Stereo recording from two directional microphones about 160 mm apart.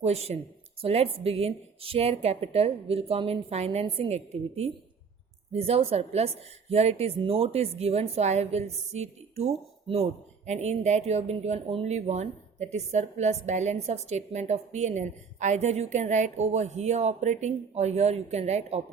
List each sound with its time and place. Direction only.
0.0 s a woman's voice: 40° right (ahead or behind)